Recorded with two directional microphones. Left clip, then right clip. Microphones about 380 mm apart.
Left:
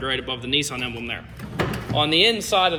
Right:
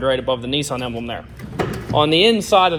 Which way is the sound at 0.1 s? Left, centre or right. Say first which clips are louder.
Right 1 dB; centre.